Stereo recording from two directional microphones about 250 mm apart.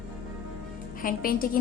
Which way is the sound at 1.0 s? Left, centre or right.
Left.